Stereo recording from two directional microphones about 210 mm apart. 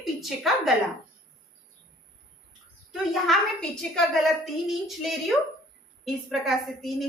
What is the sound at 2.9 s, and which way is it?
A woman's voice, centre (ahead or behind).